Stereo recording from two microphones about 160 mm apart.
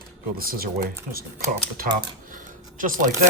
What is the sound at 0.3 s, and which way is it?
Speech, 65° right (ahead or behind).